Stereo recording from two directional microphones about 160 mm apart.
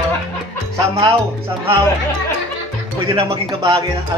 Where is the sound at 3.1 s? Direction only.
35° right (ahead or behind).